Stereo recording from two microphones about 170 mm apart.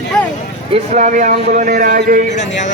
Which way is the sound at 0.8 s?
45° right (ahead or behind).